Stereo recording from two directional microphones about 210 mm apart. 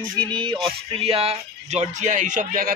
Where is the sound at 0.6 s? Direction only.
25° right (ahead or behind).